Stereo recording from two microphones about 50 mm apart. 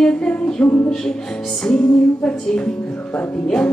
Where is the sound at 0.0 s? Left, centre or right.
Centre.